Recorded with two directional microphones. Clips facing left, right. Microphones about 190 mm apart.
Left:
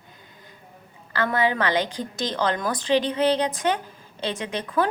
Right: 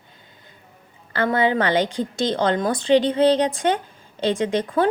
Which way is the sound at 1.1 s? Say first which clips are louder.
Right 3 dB; 25° right (ahead or behind).